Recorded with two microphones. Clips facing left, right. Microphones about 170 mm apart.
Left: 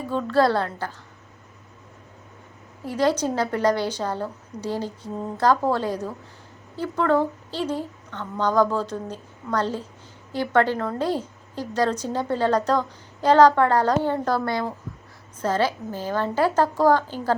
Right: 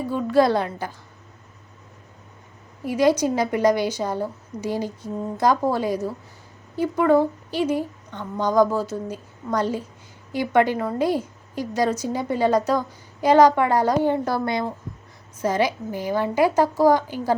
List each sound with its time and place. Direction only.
0.1 s a woman's voice: 10° right (ahead or behind)
2.8 s a woman's voice: 10° right (ahead or behind)